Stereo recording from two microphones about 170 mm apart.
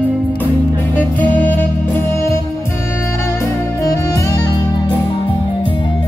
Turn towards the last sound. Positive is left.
turn(degrees=20)  # may be behind; listen again after turning